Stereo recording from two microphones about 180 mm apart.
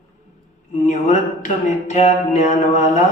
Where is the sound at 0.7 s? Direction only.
45° left (ahead or behind).